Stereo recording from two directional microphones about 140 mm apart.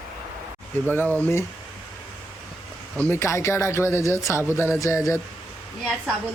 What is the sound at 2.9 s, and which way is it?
Speech, 15° left (ahead or behind).